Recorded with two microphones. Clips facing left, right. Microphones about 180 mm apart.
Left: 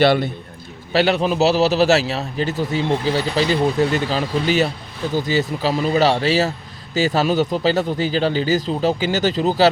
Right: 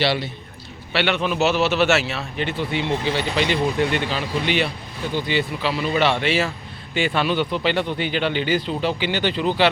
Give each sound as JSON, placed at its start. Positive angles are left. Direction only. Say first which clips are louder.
{"t": 0.0, "sound": "a man's voice", "louder": "left 7 dB", "side_deg": 50}
{"t": 0.9, "sound": "a man's voice", "louder": "left 5 dB", "side_deg": 40}